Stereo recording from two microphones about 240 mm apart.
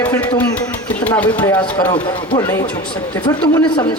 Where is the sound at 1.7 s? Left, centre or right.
Centre.